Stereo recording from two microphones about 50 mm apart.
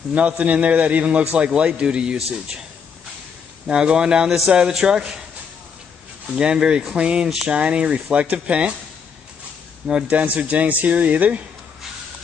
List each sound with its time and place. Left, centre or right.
0.4 s a man's voice: right
3.6 s a man's voice: centre
6.3 s a man's voice: centre
10.0 s speech: right